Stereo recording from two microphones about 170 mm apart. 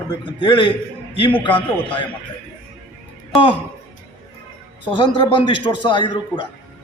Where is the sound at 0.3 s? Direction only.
30° left (ahead or behind).